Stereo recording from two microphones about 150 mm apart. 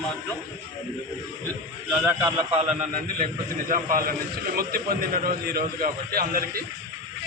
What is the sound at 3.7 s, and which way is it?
Speech, 70° right (ahead or behind).